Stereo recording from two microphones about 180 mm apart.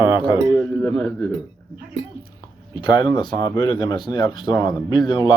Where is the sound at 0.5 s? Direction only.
5° left (ahead or behind).